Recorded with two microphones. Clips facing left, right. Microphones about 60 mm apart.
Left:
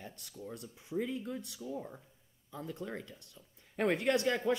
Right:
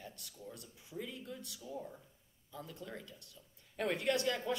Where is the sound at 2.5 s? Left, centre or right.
Left.